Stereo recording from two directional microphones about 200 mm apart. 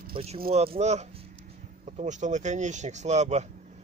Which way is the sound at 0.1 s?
30° right (ahead or behind).